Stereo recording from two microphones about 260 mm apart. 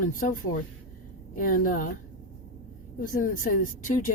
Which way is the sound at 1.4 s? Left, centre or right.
Left.